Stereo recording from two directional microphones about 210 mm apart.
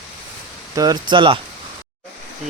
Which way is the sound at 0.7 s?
20° right (ahead or behind).